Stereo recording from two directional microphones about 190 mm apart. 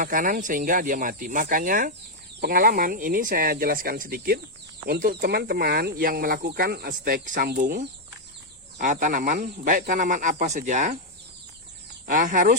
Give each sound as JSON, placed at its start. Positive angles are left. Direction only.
{"t": 0.0, "sound": "speech", "side_deg": -45}
{"t": 8.8, "sound": "speech", "side_deg": -45}
{"t": 12.0, "sound": "speech", "side_deg": -45}